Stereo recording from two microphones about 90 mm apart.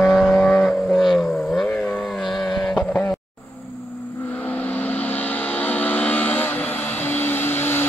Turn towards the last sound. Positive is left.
turn(degrees=25)  # may be behind; listen again after turning